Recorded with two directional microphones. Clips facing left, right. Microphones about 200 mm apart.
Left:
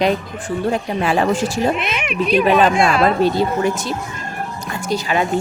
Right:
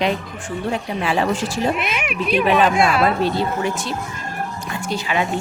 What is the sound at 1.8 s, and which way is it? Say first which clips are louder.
Speech: left 2 dB; 5° right (ahead or behind).